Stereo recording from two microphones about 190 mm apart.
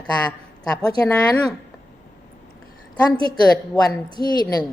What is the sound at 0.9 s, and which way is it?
Speech, 20° left (ahead or behind).